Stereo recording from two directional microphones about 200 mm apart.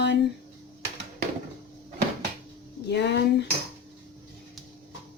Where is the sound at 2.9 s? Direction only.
60° left (ahead or behind).